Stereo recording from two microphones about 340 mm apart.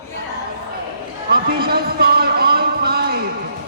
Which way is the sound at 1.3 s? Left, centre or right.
Right.